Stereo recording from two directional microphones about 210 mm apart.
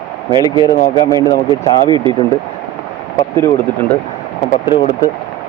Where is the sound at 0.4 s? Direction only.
20° left (ahead or behind).